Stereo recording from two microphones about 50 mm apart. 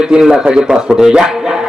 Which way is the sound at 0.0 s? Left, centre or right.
Centre.